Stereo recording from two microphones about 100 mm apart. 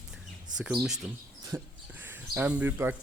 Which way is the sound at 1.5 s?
25° right (ahead or behind).